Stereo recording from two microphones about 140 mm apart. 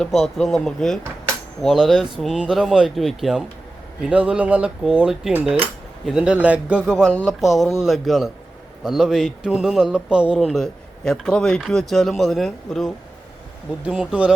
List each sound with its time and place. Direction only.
0.0 s a man's voice: centre (ahead or behind)
6.9 s speech: 10° left (ahead or behind)
7.3 s a man's voice: centre (ahead or behind)